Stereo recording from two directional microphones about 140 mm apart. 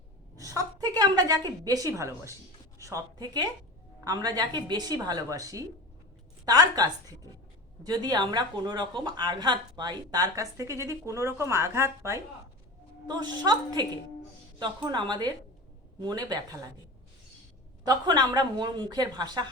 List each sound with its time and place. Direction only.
0.3 s a woman's voice: 25° right (ahead or behind)
13.1 s speech: 30° right (ahead or behind)
14.9 s a woman's voice: 35° right (ahead or behind)
17.8 s speech: 30° right (ahead or behind)